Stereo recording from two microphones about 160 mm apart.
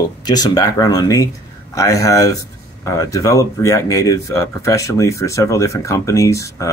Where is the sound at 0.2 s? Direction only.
25° left (ahead or behind).